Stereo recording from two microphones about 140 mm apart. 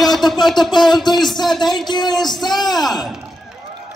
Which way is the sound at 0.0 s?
Centre (ahead or behind).